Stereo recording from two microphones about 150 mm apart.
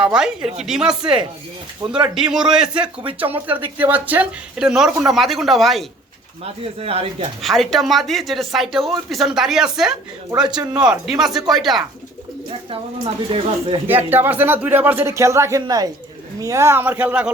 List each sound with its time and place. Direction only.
0.0 s speech: 5° right (ahead or behind)
1.8 s speech: 25° right (ahead or behind)
2.1 s speech: 5° right (ahead or behind)
3.3 s speech: 35° right (ahead or behind)
3.8 s speech: 10° right (ahead or behind)
6.4 s speech: 40° right (ahead or behind)
7.4 s speech: centre (ahead or behind)
13.3 s speech: 35° right (ahead or behind)
13.8 s speech: 15° right (ahead or behind)